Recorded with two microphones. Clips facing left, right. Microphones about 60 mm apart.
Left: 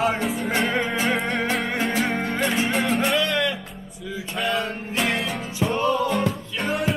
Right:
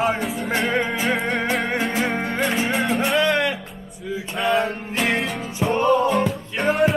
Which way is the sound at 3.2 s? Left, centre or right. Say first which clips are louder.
Right 3 dB; right.